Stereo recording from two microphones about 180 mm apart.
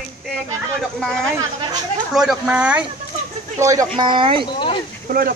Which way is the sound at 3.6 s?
15° right (ahead or behind).